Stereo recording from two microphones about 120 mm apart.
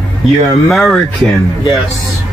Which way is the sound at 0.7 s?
5° left (ahead or behind).